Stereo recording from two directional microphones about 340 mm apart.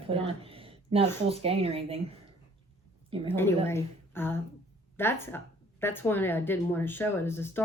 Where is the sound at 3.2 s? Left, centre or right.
Centre.